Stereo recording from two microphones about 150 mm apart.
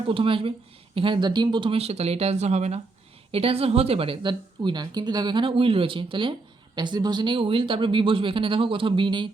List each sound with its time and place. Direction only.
0.1 s a woman's voice: 35° right (ahead or behind)